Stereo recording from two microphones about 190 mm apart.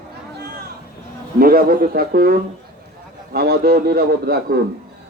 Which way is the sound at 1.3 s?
50° right (ahead or behind).